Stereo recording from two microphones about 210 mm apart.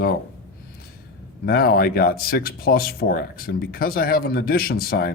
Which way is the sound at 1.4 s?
45° left (ahead or behind).